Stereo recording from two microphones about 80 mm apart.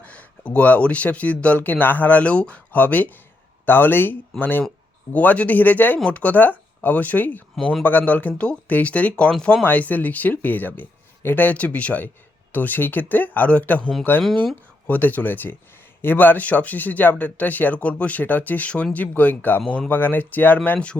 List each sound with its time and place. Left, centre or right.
0.0 s speech: centre
7.5 s speech: centre
7.9 s speech: left
19.6 s speech: centre
19.9 s speech: left